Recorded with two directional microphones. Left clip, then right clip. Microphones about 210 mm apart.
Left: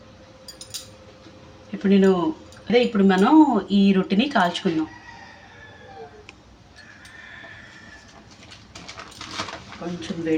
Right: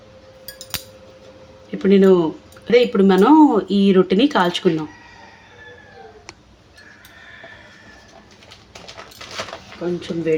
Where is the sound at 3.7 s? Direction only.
55° right (ahead or behind).